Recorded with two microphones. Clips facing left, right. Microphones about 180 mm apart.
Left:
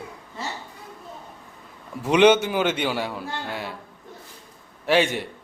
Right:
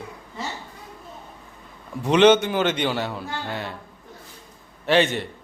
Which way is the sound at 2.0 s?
10° left (ahead or behind).